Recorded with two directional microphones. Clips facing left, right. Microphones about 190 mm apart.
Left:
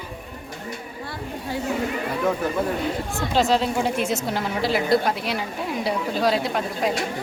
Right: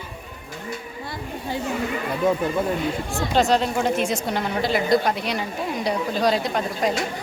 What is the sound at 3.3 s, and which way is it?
A woman's voice, centre (ahead or behind).